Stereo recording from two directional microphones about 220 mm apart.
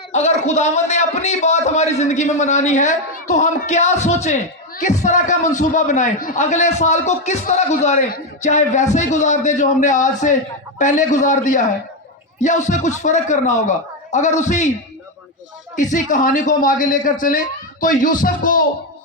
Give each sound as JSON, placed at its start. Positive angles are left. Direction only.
{"t": 0.1, "sound": "a man's voice", "side_deg": 30}
{"t": 15.7, "sound": "a man's voice", "side_deg": 35}